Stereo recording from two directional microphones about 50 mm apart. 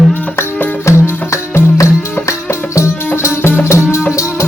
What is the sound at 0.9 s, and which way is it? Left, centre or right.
Music, left.